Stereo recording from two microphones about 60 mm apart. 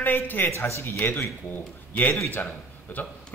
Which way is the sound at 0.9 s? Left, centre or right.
Left.